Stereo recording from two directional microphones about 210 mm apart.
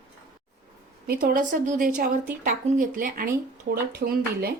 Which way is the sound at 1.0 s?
40° right (ahead or behind).